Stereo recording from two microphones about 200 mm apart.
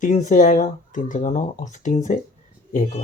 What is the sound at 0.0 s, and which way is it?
Speech, 40° left (ahead or behind).